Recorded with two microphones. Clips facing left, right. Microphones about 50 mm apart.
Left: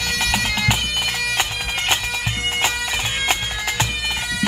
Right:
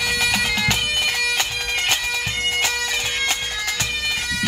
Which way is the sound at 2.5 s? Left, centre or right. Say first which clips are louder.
Left 2 dB; left.